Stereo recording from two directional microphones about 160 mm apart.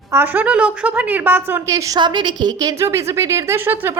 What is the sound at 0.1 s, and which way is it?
A woman's voice, 15° right (ahead or behind).